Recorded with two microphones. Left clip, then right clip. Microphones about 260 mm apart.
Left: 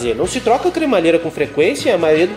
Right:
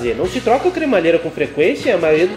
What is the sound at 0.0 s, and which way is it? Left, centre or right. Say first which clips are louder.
Speech: left 1 dB; left.